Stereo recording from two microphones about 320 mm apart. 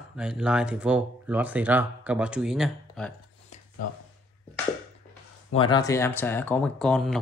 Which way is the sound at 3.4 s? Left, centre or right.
Left.